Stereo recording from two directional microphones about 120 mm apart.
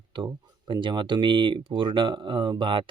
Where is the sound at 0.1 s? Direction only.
40° right (ahead or behind).